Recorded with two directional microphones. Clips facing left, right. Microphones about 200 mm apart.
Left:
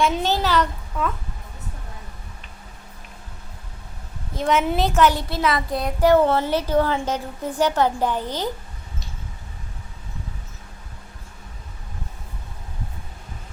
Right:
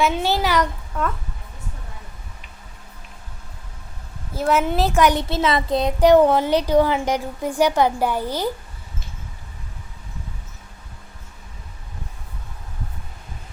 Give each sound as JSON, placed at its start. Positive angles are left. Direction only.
{"t": 0.0, "sound": "a child's voice", "side_deg": -5}
{"t": 0.9, "sound": "speech", "side_deg": 0}
{"t": 4.4, "sound": "a child's voice", "side_deg": -5}